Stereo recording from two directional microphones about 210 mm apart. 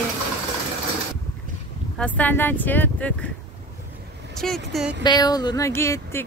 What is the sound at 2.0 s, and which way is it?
Speech, 5° left (ahead or behind).